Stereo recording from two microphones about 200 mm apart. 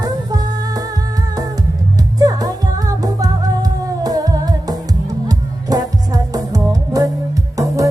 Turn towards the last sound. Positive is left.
turn(degrees=-15)  # may be behind; listen again after turning